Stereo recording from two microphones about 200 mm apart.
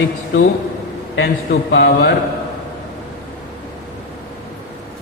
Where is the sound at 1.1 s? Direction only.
55° left (ahead or behind).